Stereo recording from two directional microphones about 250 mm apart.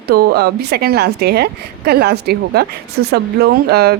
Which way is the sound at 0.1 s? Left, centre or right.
Right.